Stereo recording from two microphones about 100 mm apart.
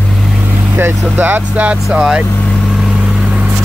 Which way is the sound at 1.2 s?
15° right (ahead or behind).